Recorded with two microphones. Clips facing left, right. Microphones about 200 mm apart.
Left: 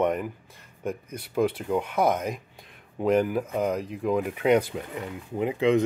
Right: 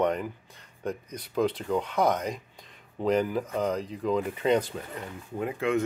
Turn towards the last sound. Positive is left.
turn(degrees=15)  # may be behind; listen again after turning